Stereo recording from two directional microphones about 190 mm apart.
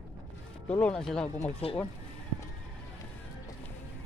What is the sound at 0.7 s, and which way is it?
Speech, 5° left (ahead or behind).